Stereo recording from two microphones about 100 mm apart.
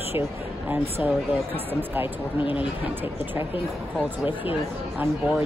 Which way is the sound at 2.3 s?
60° left (ahead or behind).